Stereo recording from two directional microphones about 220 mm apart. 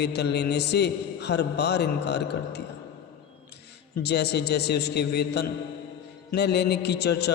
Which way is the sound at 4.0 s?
50° left (ahead or behind).